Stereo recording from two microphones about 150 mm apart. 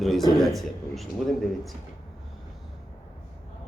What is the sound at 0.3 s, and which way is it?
Speech, centre (ahead or behind).